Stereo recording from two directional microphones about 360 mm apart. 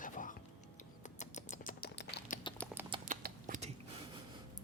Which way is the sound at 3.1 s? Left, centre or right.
Right.